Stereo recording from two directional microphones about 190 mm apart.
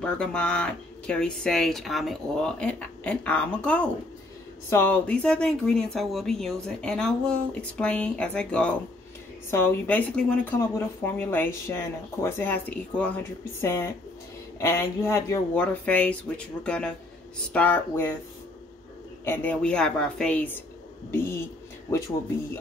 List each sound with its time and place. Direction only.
0.0 s speech: 5° left (ahead or behind)
19.2 s speech: 10° left (ahead or behind)